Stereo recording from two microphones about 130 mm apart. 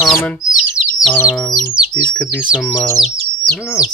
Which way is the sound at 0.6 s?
Centre (ahead or behind).